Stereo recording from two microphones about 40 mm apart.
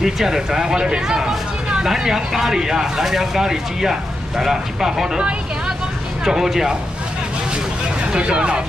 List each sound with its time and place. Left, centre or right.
0.0 s speech: centre
6.2 s speech: centre
8.1 s speech: right